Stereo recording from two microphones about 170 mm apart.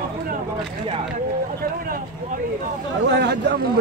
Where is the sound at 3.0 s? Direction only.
75° right (ahead or behind).